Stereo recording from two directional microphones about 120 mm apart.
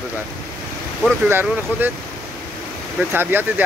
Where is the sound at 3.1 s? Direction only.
15° right (ahead or behind).